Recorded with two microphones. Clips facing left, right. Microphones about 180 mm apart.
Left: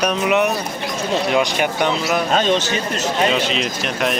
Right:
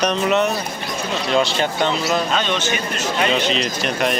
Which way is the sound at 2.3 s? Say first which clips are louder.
Left 4 dB; 40° left (ahead or behind).